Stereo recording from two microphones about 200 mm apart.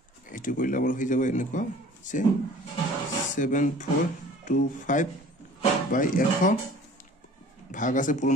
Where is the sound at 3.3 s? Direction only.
40° left (ahead or behind).